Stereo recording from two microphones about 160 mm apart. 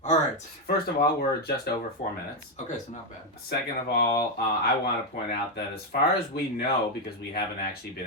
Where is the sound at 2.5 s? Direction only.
50° left (ahead or behind).